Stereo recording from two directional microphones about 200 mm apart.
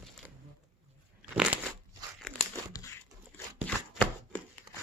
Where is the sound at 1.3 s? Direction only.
5° right (ahead or behind).